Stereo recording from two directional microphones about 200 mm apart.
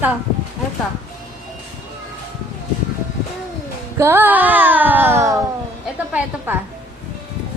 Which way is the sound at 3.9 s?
10° right (ahead or behind).